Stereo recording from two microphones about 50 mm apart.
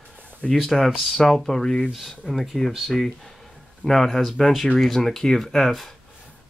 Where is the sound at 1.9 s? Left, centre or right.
Centre.